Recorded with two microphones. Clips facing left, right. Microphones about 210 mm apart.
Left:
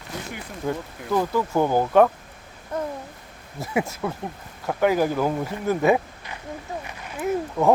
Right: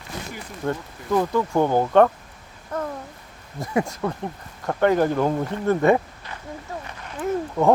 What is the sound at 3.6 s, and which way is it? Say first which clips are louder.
Speech: right 2 dB; 5° left (ahead or behind).